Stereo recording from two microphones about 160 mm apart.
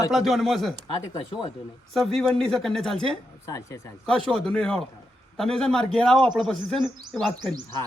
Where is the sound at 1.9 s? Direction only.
5° left (ahead or behind).